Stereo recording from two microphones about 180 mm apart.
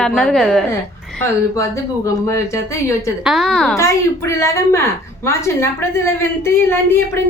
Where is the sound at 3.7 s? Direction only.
15° left (ahead or behind).